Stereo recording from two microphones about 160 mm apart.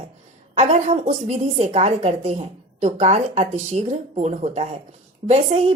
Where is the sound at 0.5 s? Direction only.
45° right (ahead or behind).